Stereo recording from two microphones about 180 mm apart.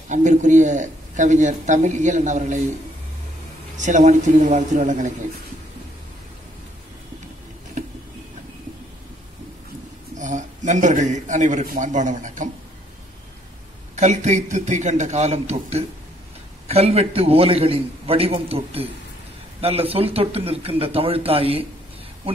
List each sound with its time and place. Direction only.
0.1 s speech: 40° right (ahead or behind)
3.7 s speech: 45° right (ahead or behind)
10.1 s speech: 40° right (ahead or behind)
13.9 s a man's voice: 40° right (ahead or behind)